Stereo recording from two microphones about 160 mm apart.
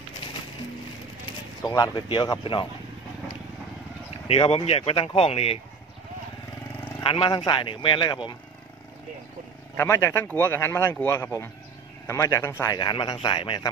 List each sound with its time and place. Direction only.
1.6 s speech: 25° left (ahead or behind)
4.3 s speech: 35° left (ahead or behind)
7.0 s speech: 30° left (ahead or behind)
9.8 s speech: 15° left (ahead or behind)